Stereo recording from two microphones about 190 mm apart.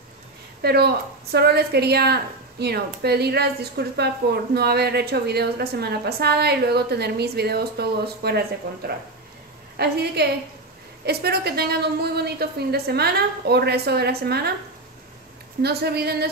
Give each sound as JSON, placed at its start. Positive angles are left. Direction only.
{"t": 0.6, "sound": "a woman's voice", "side_deg": -55}
{"t": 15.6, "sound": "a woman's voice", "side_deg": -60}